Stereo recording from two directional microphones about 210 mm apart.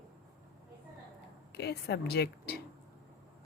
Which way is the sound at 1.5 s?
50° left (ahead or behind).